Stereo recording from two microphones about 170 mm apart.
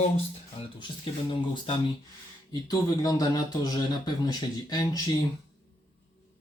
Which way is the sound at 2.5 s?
20° left (ahead or behind).